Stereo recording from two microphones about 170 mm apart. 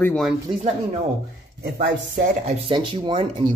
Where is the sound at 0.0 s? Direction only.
5° left (ahead or behind).